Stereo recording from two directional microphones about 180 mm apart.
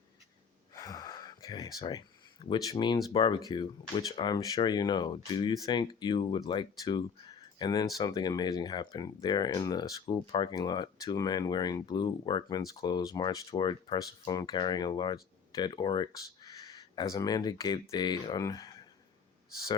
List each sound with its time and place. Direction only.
0.7 s speech: 20° left (ahead or behind)